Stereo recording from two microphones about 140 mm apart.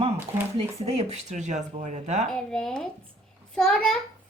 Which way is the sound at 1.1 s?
60° right (ahead or behind).